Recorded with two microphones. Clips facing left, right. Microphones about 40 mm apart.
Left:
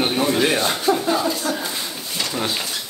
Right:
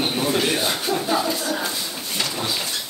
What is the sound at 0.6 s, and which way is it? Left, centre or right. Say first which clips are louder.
Speech: left 4 dB; centre.